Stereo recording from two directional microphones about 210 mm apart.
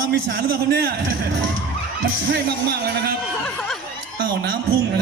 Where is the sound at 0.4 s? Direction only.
45° right (ahead or behind).